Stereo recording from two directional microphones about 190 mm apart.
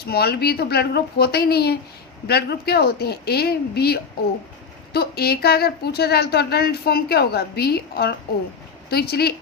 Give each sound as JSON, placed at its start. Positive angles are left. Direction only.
{"t": 0.0, "sound": "a woman's voice", "side_deg": 55}